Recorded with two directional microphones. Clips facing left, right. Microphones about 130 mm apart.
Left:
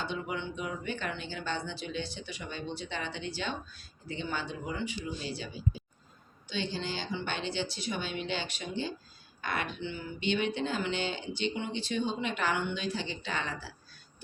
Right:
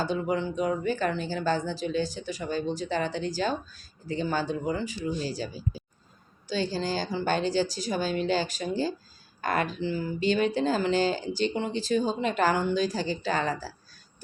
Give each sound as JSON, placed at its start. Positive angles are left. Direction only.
{"t": 0.0, "sound": "speech", "side_deg": -40}